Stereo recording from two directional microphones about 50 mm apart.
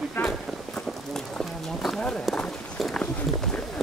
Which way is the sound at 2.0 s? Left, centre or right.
Centre.